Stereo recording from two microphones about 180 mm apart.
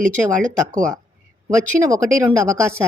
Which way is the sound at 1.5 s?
15° right (ahead or behind).